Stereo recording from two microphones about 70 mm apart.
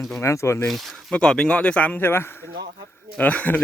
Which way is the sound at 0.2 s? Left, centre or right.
Left.